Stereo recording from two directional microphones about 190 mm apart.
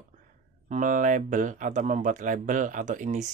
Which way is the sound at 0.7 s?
40° right (ahead or behind).